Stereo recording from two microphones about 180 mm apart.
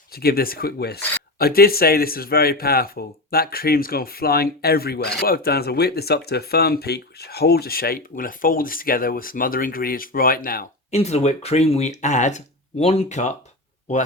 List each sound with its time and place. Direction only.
0.1 s speech: 55° left (ahead or behind)
10.9 s speech: 35° left (ahead or behind)